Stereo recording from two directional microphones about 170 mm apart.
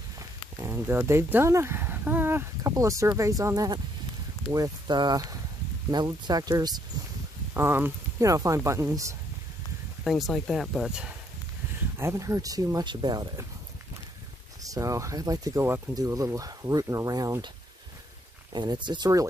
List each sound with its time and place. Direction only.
0.6 s speech: 15° right (ahead or behind)
7.5 s speech: 15° right (ahead or behind)
10.0 s speech: centre (ahead or behind)
12.0 s speech: 15° right (ahead or behind)
14.6 s speech: 20° right (ahead or behind)
18.5 s speech: 25° right (ahead or behind)